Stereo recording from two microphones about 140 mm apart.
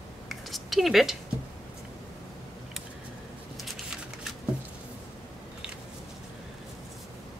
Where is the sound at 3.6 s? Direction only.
5° right (ahead or behind).